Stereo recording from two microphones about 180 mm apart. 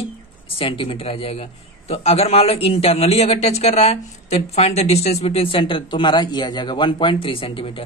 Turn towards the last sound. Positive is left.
turn(degrees=30)  # may be behind; listen again after turning